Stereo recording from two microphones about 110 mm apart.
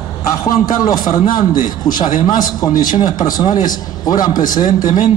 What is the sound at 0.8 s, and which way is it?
A man's voice, 35° left (ahead or behind).